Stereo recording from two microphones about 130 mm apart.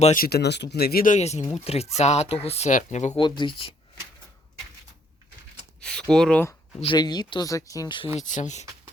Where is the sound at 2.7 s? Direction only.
65° left (ahead or behind).